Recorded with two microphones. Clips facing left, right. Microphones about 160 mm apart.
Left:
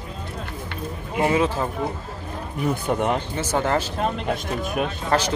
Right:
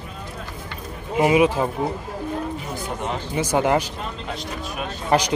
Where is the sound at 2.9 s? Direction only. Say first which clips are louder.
Left 7 dB; 50° left (ahead or behind).